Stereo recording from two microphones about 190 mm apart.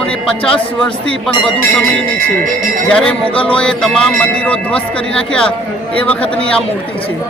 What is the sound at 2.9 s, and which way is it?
A man's voice, 5° left (ahead or behind).